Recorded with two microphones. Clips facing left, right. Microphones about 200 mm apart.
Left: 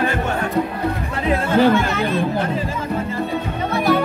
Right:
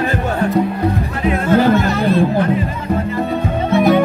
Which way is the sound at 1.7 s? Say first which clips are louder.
Right 4 dB; 35° right (ahead or behind).